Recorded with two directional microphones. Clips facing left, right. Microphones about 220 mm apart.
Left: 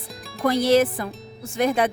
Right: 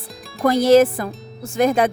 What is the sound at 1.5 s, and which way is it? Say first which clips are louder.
Speech: right 4 dB; 45° right (ahead or behind).